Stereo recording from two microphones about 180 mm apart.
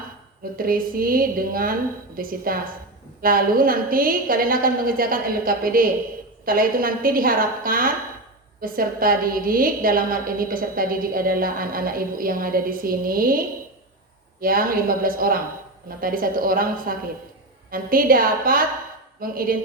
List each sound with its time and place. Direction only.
0.5 s a woman's voice: 55° right (ahead or behind)
14.4 s a woman's voice: 55° right (ahead or behind)